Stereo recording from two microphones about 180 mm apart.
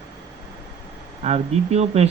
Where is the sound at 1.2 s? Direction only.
35° right (ahead or behind).